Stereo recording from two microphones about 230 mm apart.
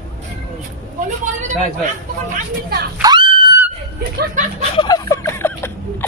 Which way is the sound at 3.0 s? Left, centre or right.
Centre.